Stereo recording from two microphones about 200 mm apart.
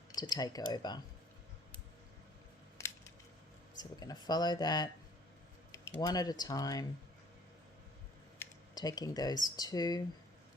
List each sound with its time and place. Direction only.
0.1 s speech: 20° left (ahead or behind)
3.8 s speech: 20° left (ahead or behind)
6.0 s speech: 20° left (ahead or behind)
8.4 s speech: 20° left (ahead or behind)